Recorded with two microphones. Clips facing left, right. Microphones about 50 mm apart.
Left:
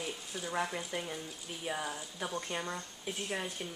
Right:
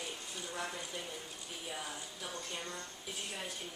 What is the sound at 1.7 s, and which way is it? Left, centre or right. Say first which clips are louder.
Speech: left 7 dB; left.